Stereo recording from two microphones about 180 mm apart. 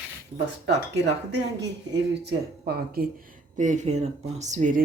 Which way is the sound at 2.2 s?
60° right (ahead or behind).